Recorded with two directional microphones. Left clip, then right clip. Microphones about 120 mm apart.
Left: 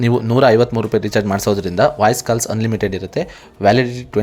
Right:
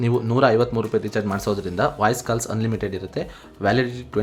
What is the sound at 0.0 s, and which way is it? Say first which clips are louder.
Speech: left 6 dB; 40° left (ahead or behind).